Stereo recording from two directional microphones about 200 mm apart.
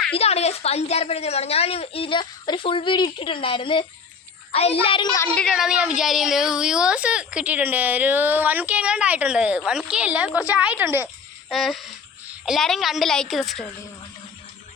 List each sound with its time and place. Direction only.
0.1 s a woman's voice: 30° left (ahead or behind)
5.3 s a woman's voice: 5° left (ahead or behind); by 11.1 s 10° right (ahead or behind)
11.4 s a sound: centre (ahead or behind)
12.5 s a woman's voice: centre (ahead or behind)